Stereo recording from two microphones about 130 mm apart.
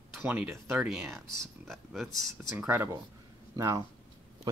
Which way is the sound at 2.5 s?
15° right (ahead or behind).